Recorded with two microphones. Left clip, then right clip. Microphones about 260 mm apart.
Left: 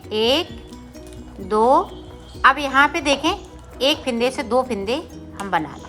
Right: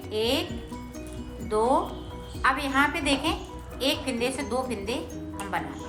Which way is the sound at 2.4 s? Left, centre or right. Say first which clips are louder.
Left 9 dB; left.